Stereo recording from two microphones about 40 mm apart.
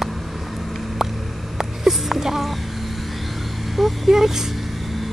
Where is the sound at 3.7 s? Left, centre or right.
Centre.